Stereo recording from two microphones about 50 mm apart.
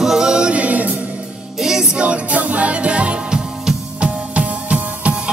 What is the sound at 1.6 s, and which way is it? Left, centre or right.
Music, centre.